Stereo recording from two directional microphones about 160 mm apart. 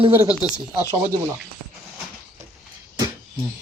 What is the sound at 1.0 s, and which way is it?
Speech, 20° right (ahead or behind).